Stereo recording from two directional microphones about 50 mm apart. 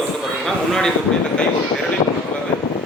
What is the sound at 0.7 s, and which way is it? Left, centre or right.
Speech, centre.